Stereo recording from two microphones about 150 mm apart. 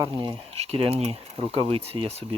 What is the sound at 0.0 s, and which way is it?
Speech, 25° right (ahead or behind).